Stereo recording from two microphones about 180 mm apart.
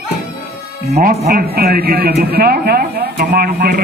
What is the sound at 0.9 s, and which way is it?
Speech, 55° right (ahead or behind).